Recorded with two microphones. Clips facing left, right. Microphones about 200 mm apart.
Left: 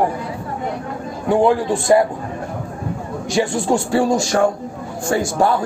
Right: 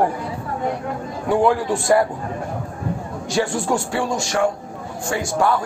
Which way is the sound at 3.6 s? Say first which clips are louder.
Left 5 dB; 30° left (ahead or behind).